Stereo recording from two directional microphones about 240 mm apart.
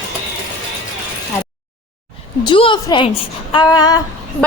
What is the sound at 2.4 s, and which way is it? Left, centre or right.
A woman's voice, left.